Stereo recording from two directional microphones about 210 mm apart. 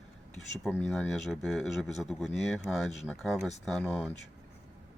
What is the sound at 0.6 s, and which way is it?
Speech, centre (ahead or behind).